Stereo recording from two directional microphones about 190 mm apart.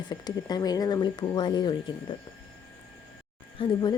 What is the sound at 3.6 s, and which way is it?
Speech, 20° left (ahead or behind).